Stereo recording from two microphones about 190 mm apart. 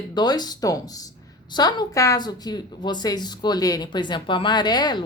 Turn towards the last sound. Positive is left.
turn(degrees=20)  # may be behind; listen again after turning